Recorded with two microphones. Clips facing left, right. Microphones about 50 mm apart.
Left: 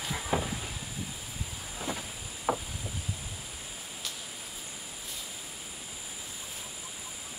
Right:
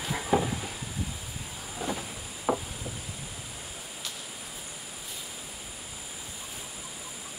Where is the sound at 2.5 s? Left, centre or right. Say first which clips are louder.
Right 2 dB; centre.